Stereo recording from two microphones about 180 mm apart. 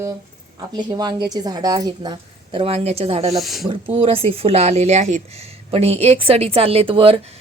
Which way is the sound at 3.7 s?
30° right (ahead or behind).